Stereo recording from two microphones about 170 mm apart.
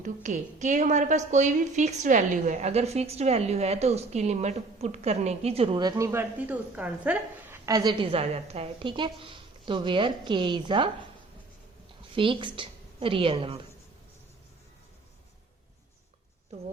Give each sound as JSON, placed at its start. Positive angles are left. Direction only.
{"t": 0.0, "sound": "a woman's voice", "side_deg": -45}
{"t": 8.1, "sound": "a woman's voice", "side_deg": -35}
{"t": 12.1, "sound": "a woman's voice", "side_deg": -30}